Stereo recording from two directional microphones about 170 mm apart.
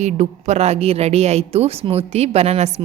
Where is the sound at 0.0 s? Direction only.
40° right (ahead or behind).